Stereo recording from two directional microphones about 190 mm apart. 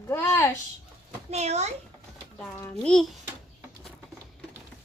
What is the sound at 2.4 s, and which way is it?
Speech, 10° left (ahead or behind).